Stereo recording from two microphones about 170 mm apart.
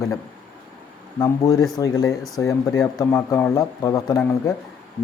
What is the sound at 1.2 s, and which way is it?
Speech, 20° left (ahead or behind).